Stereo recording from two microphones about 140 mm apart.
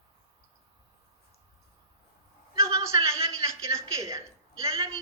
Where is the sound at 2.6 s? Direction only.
25° right (ahead or behind).